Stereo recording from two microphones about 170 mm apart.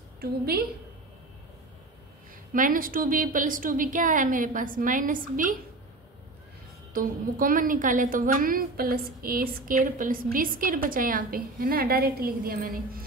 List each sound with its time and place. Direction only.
0.2 s a woman's voice: 65° right (ahead or behind)
2.5 s a woman's voice: 55° right (ahead or behind)
6.9 s a woman's voice: 55° right (ahead or behind)